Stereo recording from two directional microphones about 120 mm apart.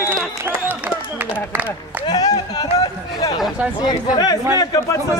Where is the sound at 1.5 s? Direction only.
15° right (ahead or behind).